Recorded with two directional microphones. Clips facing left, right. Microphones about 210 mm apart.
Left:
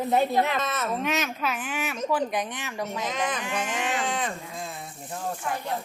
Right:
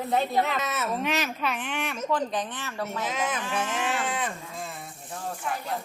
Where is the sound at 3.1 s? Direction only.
5° right (ahead or behind).